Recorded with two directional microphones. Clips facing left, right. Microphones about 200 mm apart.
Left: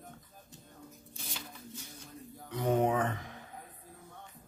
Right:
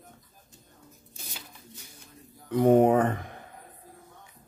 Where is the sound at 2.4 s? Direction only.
55° right (ahead or behind).